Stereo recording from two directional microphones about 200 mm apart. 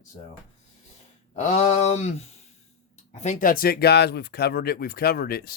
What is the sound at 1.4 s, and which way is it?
Speech, 35° left (ahead or behind).